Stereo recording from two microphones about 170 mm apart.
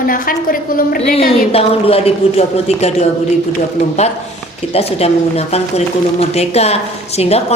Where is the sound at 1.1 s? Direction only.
35° left (ahead or behind).